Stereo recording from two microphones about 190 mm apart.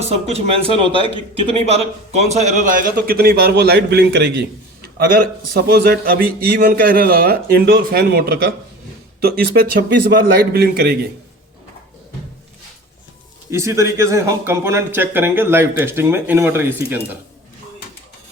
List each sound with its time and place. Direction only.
0.0 s a man's voice: 35° right (ahead or behind); by 10.9 s 55° right (ahead or behind)
13.5 s speech: 15° right (ahead or behind)